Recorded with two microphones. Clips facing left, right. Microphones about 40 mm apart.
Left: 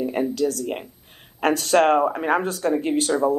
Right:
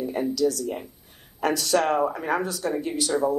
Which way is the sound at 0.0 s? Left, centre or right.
Left.